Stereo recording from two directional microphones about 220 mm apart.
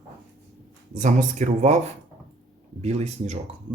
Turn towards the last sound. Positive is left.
turn(degrees=-30)  # may be behind; listen again after turning